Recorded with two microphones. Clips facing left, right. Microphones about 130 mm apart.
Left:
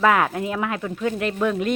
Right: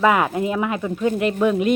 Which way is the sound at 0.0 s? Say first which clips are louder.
Right 1 dB; 5° right (ahead or behind).